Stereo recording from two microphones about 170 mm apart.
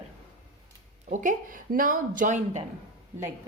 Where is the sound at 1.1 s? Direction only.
50° right (ahead or behind).